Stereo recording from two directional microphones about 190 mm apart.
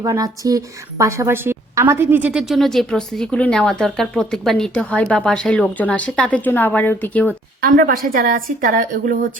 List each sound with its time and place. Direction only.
0.0 s a woman's voice: 20° right (ahead or behind); by 7.3 s 10° left (ahead or behind)
7.6 s a woman's voice: 45° right (ahead or behind)